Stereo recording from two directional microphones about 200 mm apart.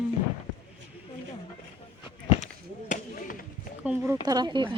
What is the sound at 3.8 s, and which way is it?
Speech, 5° right (ahead or behind).